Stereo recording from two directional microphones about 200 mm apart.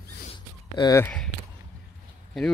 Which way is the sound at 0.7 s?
15° left (ahead or behind).